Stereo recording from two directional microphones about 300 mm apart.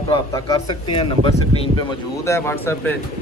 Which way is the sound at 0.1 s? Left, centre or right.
Centre.